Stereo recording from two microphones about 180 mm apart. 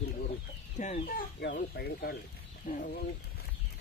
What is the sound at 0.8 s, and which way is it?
Speech, 45° left (ahead or behind).